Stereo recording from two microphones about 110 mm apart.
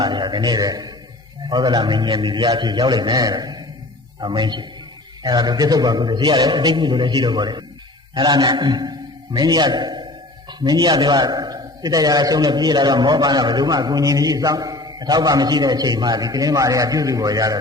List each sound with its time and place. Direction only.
0.0 s a man's voice: 40° right (ahead or behind)